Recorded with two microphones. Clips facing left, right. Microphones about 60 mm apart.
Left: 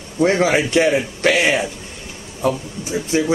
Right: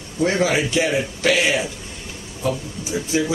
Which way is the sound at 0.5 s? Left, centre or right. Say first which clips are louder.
Left 4 dB; left.